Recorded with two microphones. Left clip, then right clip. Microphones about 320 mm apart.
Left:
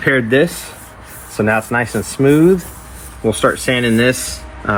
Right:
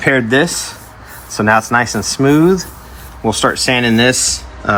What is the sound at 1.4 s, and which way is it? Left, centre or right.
Speech, centre.